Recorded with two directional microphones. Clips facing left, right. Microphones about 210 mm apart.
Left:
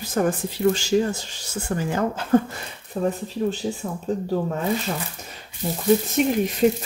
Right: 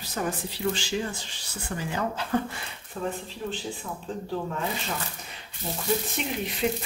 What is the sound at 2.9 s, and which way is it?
Speech, 30° left (ahead or behind).